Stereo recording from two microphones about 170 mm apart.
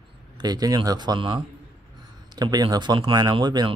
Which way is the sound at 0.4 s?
25° right (ahead or behind).